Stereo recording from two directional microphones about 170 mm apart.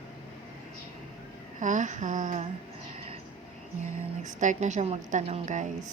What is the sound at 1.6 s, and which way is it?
Speech, 45° right (ahead or behind).